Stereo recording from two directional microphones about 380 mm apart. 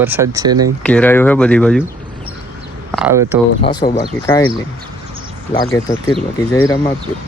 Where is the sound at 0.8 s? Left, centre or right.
Centre.